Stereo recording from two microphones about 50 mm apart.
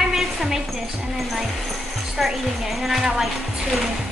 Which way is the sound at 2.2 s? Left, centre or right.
Centre.